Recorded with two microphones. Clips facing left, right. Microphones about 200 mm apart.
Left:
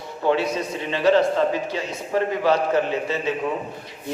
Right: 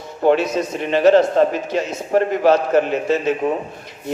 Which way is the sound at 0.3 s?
45° right (ahead or behind).